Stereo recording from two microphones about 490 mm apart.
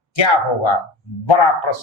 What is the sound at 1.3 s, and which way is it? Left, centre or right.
Speech, left.